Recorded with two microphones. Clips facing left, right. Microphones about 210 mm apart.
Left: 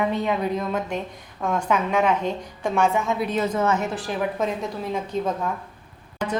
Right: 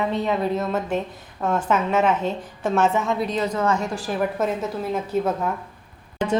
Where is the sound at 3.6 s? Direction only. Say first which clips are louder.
Right 1 dB; 20° left (ahead or behind).